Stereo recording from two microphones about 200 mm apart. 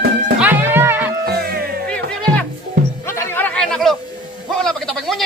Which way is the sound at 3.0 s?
15° left (ahead or behind).